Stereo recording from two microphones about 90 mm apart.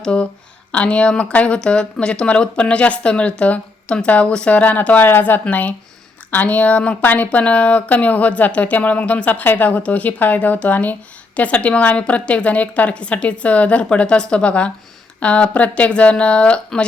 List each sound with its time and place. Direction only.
0.0 s speech: 10° left (ahead or behind)